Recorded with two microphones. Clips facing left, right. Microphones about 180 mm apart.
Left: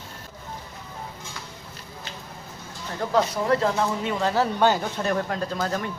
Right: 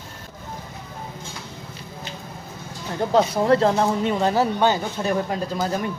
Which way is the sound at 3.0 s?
25° right (ahead or behind).